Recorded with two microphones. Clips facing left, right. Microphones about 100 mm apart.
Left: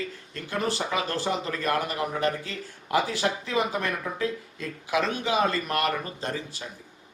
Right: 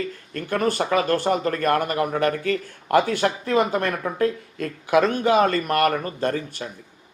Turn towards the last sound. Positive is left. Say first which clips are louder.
# right 8 dB
turn(degrees=-55)  # may be behind; listen again after turning